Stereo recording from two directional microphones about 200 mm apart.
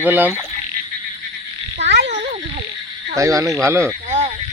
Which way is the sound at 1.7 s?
60° right (ahead or behind).